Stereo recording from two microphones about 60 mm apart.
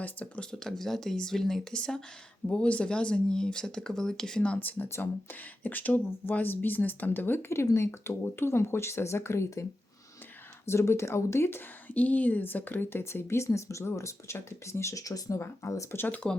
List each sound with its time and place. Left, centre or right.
0.0 s speech: left
0.5 s speech: centre
4.9 s speech: left
5.6 s speech: left
7.5 s speech: left
10.7 s speech: left
11.9 s speech: left
15.0 s speech: left
15.4 s speech: left
15.9 s speech: left